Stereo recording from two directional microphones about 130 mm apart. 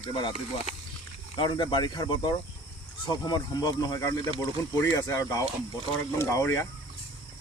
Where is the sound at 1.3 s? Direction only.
35° left (ahead or behind).